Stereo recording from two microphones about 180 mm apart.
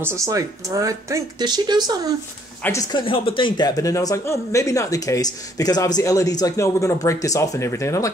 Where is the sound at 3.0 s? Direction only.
30° left (ahead or behind).